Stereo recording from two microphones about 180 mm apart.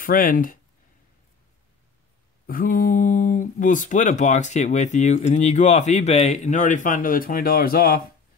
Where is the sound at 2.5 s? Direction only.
50° left (ahead or behind).